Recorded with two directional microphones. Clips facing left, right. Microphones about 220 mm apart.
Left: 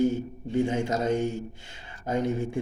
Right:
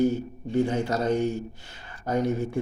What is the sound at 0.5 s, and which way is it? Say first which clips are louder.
Speech: right 1 dB; 15° left (ahead or behind).